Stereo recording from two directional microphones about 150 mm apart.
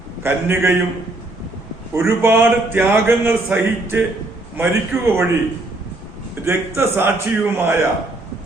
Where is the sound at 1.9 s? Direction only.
15° right (ahead or behind).